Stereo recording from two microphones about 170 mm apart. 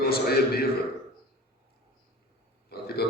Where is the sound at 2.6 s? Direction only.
65° left (ahead or behind).